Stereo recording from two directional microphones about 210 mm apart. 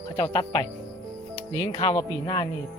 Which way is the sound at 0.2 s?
20° left (ahead or behind).